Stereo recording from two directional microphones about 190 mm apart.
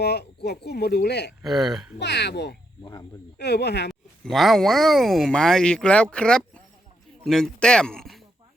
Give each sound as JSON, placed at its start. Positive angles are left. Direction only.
{"t": 0.0, "sound": "speech", "side_deg": 60}
{"t": 1.4, "sound": "speech", "side_deg": 0}
{"t": 2.0, "sound": "speech", "side_deg": 60}
{"t": 2.8, "sound": "speech", "side_deg": 20}
{"t": 3.3, "sound": "speech", "side_deg": 60}
{"t": 4.2, "sound": "speech", "side_deg": 0}